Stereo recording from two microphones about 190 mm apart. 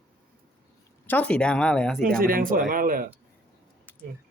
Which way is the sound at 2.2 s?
50° right (ahead or behind).